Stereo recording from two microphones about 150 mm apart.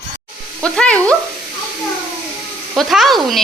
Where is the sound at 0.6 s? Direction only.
5° left (ahead or behind).